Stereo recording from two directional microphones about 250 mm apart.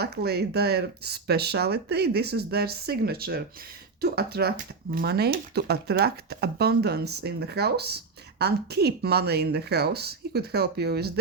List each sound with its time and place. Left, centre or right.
0.0 s speech: right